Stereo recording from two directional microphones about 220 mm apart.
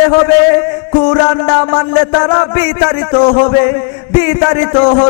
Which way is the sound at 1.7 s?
20° left (ahead or behind).